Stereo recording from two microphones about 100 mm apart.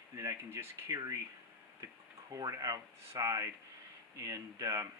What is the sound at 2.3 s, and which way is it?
Speech, 35° right (ahead or behind).